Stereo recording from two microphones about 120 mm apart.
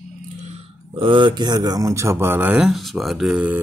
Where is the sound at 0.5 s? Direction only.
50° right (ahead or behind).